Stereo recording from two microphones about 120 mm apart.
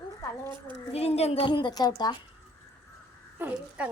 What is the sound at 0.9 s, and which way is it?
A woman's voice, 60° left (ahead or behind).